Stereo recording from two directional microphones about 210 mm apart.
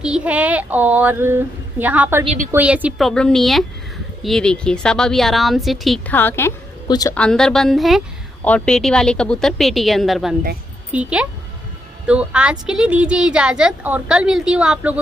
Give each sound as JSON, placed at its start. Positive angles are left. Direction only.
{"t": 0.0, "sound": "speech", "side_deg": -5}
{"t": 2.2, "sound": "a woman's voice", "side_deg": -35}
{"t": 2.5, "sound": "speech", "side_deg": -5}
{"t": 7.2, "sound": "speech", "side_deg": 5}